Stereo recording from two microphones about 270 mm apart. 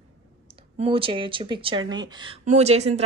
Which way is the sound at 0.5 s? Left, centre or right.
Right.